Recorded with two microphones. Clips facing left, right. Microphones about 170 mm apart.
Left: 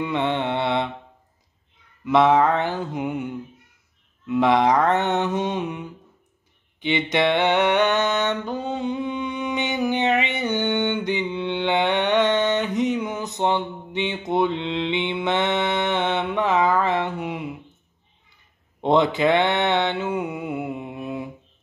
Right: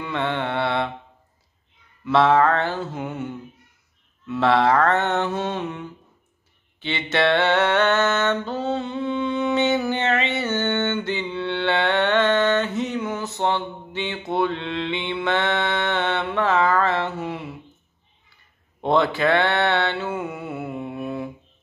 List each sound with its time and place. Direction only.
0.0 s mantra: 20° left (ahead or behind)
2.0 s mantra: 15° left (ahead or behind)
6.8 s a sound: 15° left (ahead or behind)
18.8 s mantra: 20° left (ahead or behind)